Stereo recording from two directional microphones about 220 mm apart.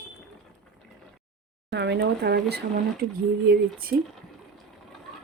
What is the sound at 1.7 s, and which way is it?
Speech, 50° right (ahead or behind).